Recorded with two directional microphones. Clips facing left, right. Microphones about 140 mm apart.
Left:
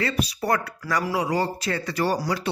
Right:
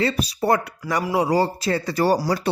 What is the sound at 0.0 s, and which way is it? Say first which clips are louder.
Speech: right 4 dB; 30° right (ahead or behind).